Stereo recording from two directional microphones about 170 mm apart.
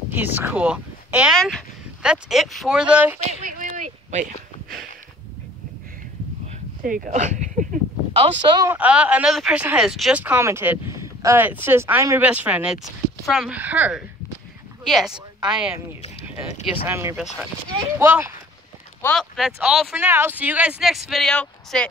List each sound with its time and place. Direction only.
0.1 s speech: 10° right (ahead or behind)
3.3 s a sound: 50° right (ahead or behind)
6.8 s speech: 55° right (ahead or behind)
8.4 s speech: 20° right (ahead or behind)
8.7 s speech: 10° right (ahead or behind)
16.6 s speech: 15° right (ahead or behind)
19.1 s speech: centre (ahead or behind)